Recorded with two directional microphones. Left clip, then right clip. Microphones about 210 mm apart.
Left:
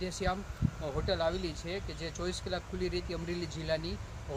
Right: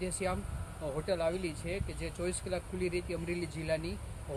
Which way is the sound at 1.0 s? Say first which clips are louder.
Left 1 dB; 15° right (ahead or behind).